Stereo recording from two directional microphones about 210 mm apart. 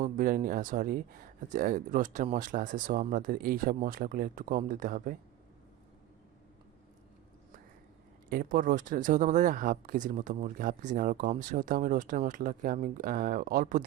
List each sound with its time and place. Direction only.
0.0 s speech: 40° right (ahead or behind)
8.3 s speech: 40° right (ahead or behind)